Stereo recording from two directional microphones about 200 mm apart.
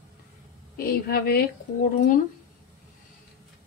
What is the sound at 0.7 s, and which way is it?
Speech, 50° left (ahead or behind).